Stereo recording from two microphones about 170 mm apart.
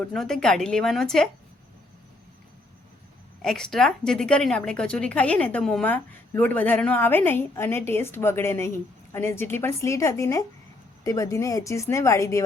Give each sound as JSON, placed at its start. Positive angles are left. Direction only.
{"t": 0.1, "sound": "a woman's voice", "side_deg": 0}
{"t": 3.4, "sound": "a woman's voice", "side_deg": 5}